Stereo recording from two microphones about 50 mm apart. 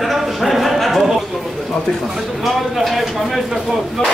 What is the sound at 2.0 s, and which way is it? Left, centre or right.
Speech, centre.